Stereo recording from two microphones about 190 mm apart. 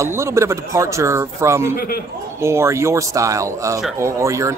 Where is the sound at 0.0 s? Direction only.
15° right (ahead or behind).